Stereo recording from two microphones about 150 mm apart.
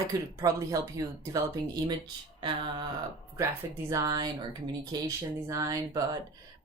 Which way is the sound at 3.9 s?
20° right (ahead or behind).